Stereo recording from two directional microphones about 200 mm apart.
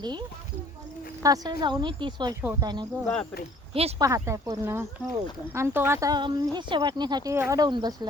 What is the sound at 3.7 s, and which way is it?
Speech, 30° right (ahead or behind).